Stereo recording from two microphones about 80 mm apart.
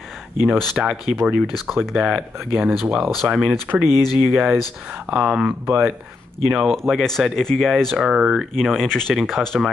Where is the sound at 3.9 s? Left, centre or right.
Left.